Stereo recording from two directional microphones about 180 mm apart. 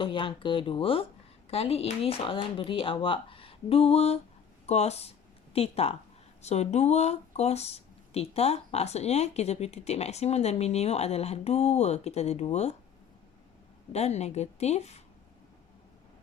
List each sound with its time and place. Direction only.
0.0 s speech: 30° left (ahead or behind)
13.9 s speech: 35° left (ahead or behind)